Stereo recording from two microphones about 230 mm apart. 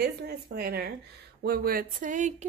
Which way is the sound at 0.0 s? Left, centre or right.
Right.